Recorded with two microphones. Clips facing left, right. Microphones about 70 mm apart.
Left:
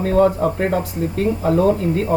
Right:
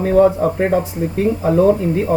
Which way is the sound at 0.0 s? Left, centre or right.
Centre.